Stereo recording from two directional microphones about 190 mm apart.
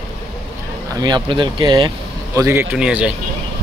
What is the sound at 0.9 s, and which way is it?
Speech, 20° right (ahead or behind).